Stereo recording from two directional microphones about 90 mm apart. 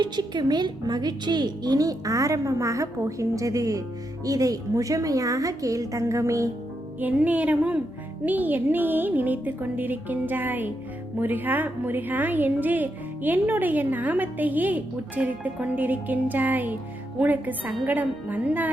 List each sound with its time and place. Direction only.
0.0 s a woman's voice: 50° right (ahead or behind); by 6.5 s 35° right (ahead or behind)
7.0 s a woman's voice: 20° right (ahead or behind)